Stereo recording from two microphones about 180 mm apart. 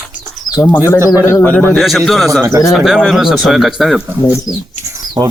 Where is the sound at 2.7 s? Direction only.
Centre (ahead or behind).